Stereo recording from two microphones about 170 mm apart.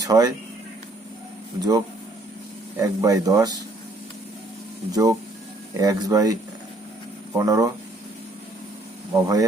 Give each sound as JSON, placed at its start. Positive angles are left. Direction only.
{"t": 0.0, "sound": "speech", "side_deg": -20}
{"t": 2.7, "sound": "speech", "side_deg": -20}
{"t": 4.9, "sound": "speech", "side_deg": -20}
{"t": 9.1, "sound": "speech", "side_deg": -20}